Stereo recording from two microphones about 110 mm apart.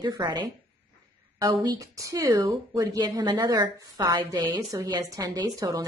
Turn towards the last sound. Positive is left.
turn(degrees=-35)  # may be behind; listen again after turning